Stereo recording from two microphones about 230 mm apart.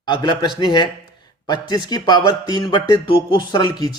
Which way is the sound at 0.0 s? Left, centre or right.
Centre.